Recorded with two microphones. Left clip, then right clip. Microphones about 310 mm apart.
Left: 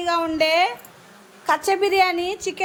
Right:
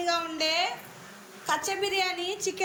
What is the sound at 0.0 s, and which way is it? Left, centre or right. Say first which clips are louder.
A woman's voice: left 8 dB; centre.